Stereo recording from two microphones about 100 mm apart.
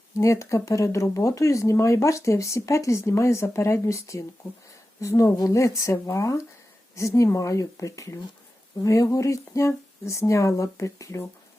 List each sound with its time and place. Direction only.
0.2 s speech: 30° left (ahead or behind)